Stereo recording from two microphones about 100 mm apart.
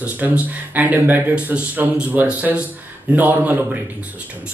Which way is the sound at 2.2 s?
10° right (ahead or behind).